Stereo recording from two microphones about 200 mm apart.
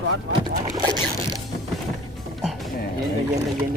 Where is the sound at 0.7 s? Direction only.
20° right (ahead or behind).